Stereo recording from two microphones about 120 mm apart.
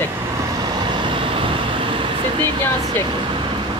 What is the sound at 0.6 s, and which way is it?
Vehicle, 40° right (ahead or behind).